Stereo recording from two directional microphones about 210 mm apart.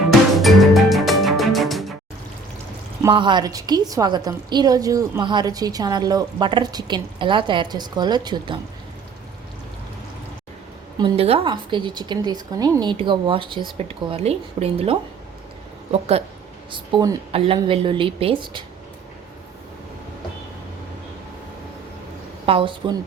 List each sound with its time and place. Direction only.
0.3 s music: centre (ahead or behind)
3.0 s a woman's voice: 20° right (ahead or behind)
10.9 s a woman's voice: 25° right (ahead or behind)
22.4 s a woman's voice: 25° right (ahead or behind)